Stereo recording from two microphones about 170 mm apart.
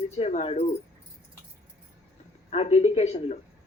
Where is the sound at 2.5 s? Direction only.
40° left (ahead or behind).